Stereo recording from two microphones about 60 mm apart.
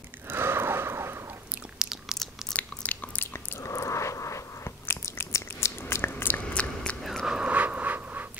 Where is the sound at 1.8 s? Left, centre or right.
Centre.